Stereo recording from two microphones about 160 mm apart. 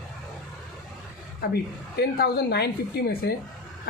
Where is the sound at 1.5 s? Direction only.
80° left.